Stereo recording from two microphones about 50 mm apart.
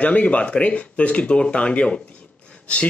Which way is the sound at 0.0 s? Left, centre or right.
Left.